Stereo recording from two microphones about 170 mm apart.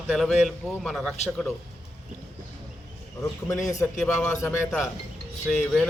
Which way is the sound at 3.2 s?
20° left (ahead or behind).